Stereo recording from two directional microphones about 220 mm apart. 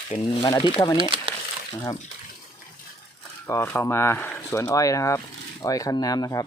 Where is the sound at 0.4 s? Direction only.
20° left (ahead or behind).